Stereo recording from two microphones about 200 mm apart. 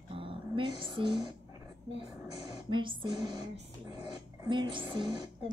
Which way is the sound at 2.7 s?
25° right (ahead or behind).